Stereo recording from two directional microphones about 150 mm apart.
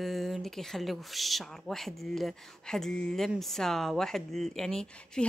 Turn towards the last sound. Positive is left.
turn(degrees=5)  # may be behind; listen again after turning